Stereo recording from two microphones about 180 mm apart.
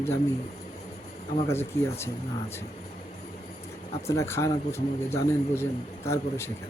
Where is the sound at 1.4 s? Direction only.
15° left (ahead or behind).